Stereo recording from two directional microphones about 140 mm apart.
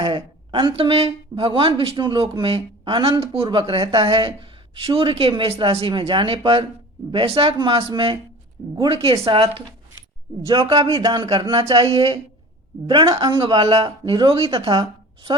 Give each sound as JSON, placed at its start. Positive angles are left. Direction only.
{"t": 0.0, "sound": "speech", "side_deg": -35}
{"t": 10.4, "sound": "speech", "side_deg": -30}